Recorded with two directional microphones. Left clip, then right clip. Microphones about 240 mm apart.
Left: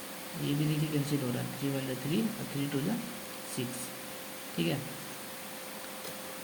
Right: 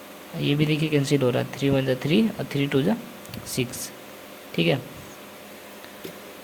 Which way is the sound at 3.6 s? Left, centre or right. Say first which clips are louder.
Right 11 dB; right.